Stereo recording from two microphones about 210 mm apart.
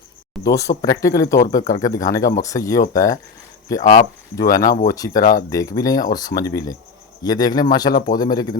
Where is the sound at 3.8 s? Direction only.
30° left (ahead or behind).